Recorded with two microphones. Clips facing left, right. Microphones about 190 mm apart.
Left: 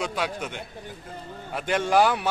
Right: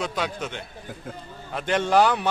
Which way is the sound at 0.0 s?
10° left (ahead or behind).